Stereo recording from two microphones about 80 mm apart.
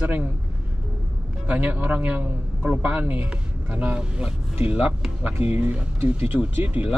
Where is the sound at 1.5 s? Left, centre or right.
Right.